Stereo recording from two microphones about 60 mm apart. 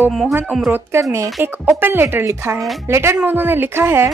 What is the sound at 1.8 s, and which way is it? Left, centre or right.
Speech, right.